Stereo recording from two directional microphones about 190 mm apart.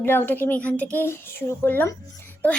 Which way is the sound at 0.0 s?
10° left (ahead or behind).